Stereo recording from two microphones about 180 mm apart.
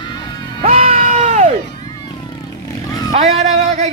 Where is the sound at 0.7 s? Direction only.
35° right (ahead or behind).